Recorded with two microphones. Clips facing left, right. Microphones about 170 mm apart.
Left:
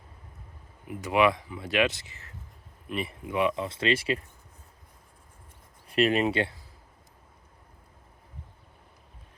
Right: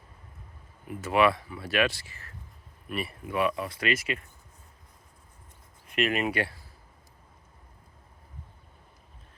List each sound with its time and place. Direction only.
0.9 s speech: 15° left (ahead or behind)
5.9 s speech: 30° left (ahead or behind)